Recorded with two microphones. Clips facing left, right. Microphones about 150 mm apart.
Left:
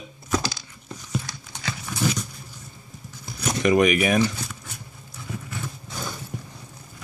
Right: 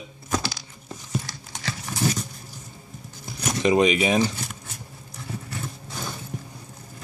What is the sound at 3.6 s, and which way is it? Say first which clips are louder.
Speech: even; 25° right (ahead or behind).